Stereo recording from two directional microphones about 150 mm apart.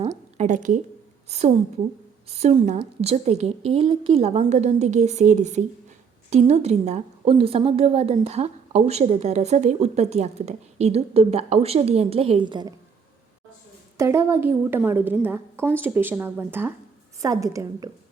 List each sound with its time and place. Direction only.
0.3 s a woman's voice: 55° right (ahead or behind)
1.3 s a woman's voice: 45° right (ahead or behind)
13.9 s a woman's voice: 20° right (ahead or behind)